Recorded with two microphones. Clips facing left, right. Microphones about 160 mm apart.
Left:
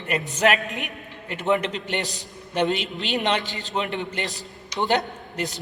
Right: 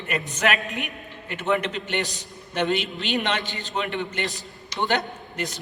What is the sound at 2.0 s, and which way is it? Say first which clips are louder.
Speech: right 1 dB; 40° left (ahead or behind).